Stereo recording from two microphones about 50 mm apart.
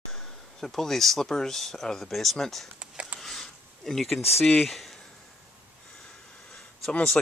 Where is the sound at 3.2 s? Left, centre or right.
Centre.